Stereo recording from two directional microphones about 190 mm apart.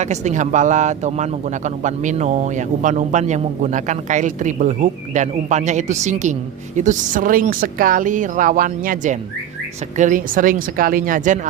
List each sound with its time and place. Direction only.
0.0 s a woman's voice: 40° right (ahead or behind)